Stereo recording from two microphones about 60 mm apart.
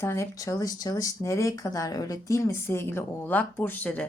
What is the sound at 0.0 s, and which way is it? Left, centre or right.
Speech, left.